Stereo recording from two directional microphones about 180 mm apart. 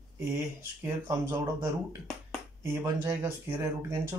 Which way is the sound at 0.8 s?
15° right (ahead or behind).